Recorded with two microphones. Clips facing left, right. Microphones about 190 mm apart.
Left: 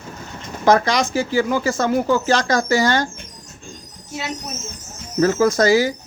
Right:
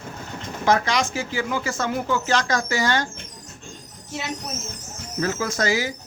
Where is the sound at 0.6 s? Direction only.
40° left (ahead or behind).